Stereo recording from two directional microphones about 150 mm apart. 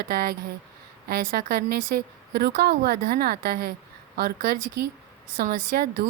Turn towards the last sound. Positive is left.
turn(degrees=-90)